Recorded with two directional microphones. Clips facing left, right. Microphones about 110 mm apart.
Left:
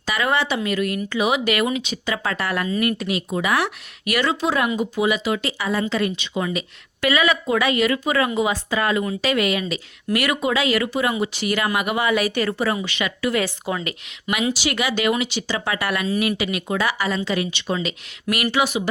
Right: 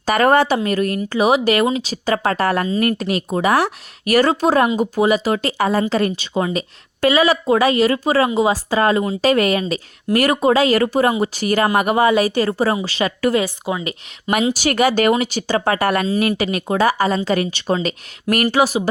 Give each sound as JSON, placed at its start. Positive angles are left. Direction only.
{"t": 0.0, "sound": "a woman's voice", "side_deg": -45}
{"t": 13.4, "sound": "speech", "side_deg": -15}
{"t": 14.5, "sound": "a woman's voice", "side_deg": -45}